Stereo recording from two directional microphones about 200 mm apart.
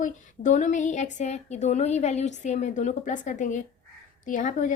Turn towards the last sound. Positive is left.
turn(degrees=40)  # may be behind; listen again after turning